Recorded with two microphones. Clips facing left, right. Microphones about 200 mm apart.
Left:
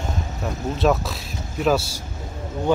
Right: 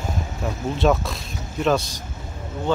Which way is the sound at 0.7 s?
Centre (ahead or behind).